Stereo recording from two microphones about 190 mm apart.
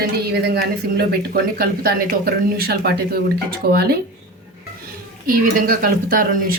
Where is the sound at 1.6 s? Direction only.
55° right (ahead or behind).